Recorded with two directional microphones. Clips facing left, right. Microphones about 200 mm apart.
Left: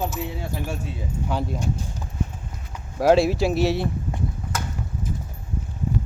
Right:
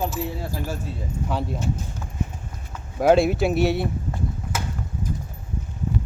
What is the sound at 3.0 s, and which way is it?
Speech, centre (ahead or behind).